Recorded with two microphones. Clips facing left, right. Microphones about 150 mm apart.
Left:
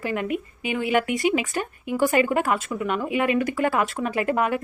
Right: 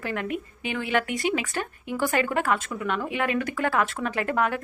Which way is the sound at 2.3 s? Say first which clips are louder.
Left 2 dB; 5° left (ahead or behind).